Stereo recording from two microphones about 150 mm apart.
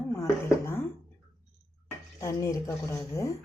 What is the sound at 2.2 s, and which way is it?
A woman's voice, 20° left (ahead or behind).